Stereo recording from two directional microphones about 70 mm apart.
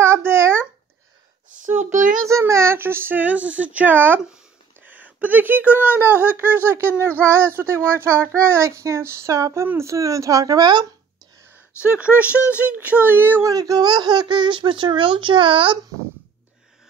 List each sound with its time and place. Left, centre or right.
0.0 s babbling: right
1.7 s child singing: right
4.8 s speech: right
11.5 s speech: right
13.4 s speech: right